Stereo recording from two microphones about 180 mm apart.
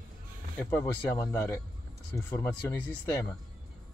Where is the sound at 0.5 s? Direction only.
15° left (ahead or behind).